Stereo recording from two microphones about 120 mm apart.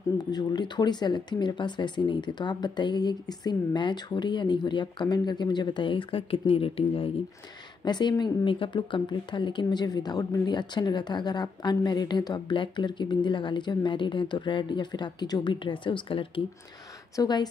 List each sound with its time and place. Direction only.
0.3 s speech: 35° left (ahead or behind); by 7.1 s 50° left (ahead or behind)
7.8 s speech: 35° left (ahead or behind)
17.1 s speech: 35° left (ahead or behind)